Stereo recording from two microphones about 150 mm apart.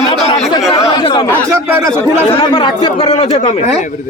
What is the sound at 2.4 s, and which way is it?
Speech, 30° left (ahead or behind).